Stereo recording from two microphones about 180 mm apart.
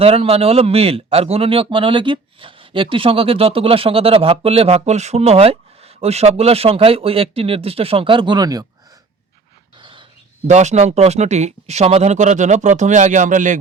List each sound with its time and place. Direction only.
0.0 s a man's voice: 35° right (ahead or behind)
9.7 s a man's voice: 25° right (ahead or behind); by 13.6 s 45° right (ahead or behind)